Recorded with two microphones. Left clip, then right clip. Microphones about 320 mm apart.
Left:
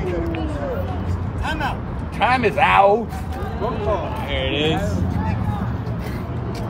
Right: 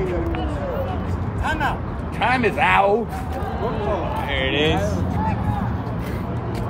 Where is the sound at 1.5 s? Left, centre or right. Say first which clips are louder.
Right 2 dB; centre.